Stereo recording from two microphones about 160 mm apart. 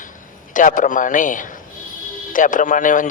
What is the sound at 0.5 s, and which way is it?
A man's voice, 55° left (ahead or behind).